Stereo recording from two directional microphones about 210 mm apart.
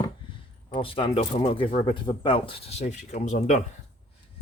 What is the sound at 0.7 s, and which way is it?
Speech, 25° left (ahead or behind).